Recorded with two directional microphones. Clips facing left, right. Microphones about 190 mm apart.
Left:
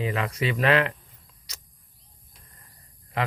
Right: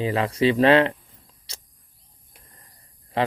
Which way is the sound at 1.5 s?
30° right (ahead or behind).